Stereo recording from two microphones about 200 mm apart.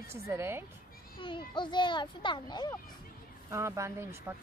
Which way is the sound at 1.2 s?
25° left (ahead or behind).